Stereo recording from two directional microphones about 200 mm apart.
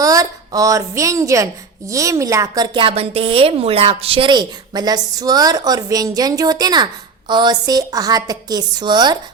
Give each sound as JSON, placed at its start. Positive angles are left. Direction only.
{"t": 0.0, "sound": "a woman's voice", "side_deg": -15}